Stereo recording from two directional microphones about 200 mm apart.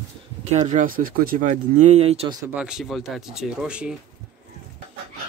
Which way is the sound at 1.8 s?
30° right (ahead or behind).